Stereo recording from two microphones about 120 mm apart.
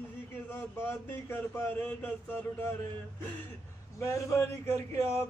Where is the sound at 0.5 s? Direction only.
15° left (ahead or behind).